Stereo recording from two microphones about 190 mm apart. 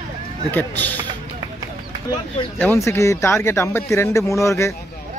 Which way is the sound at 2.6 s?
15° left (ahead or behind).